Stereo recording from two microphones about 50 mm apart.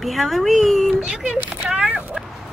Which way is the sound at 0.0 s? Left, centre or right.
Centre.